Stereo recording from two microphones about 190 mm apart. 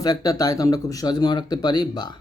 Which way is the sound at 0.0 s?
20° left (ahead or behind).